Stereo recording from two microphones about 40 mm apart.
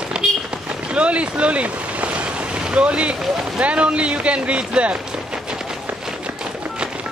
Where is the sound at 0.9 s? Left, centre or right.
Right.